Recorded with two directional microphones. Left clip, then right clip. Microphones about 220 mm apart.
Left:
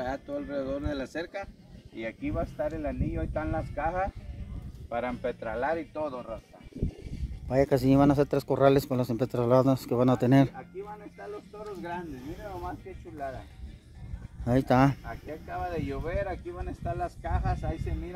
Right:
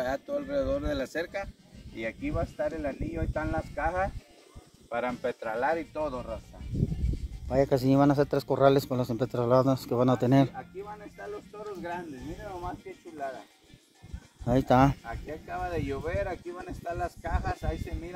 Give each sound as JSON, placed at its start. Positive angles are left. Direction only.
{"t": 0.0, "sound": "speech", "side_deg": -35}
{"t": 7.4, "sound": "speech", "side_deg": 15}
{"t": 10.5, "sound": "speech", "side_deg": -40}
{"t": 12.4, "sound": "speech", "side_deg": -10}
{"t": 14.4, "sound": "speech", "side_deg": 10}
{"t": 15.0, "sound": "speech", "side_deg": -5}